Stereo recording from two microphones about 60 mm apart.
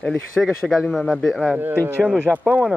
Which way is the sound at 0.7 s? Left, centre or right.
Centre.